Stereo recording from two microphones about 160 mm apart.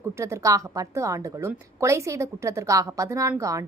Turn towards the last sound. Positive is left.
turn(degrees=-20)  # may be behind; listen again after turning